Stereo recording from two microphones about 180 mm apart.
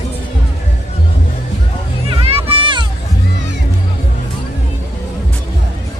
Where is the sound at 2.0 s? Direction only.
30° right (ahead or behind).